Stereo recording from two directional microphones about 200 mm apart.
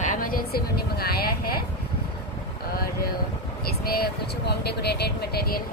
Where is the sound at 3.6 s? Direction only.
50° left (ahead or behind).